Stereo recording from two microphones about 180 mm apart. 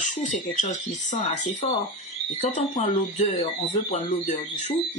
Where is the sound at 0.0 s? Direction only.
40° left (ahead or behind).